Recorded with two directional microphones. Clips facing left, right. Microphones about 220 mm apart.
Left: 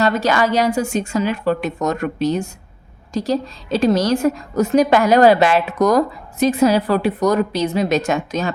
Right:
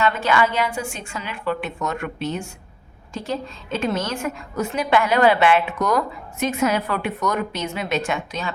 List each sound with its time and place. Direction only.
0.0 s a woman's voice: 40° left (ahead or behind)